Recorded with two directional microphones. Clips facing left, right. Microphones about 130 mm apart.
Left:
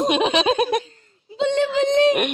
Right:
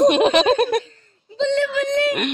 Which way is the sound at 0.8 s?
40° right (ahead or behind).